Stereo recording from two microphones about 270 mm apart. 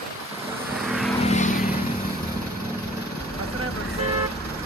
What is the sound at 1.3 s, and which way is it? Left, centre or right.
Vehicle, left.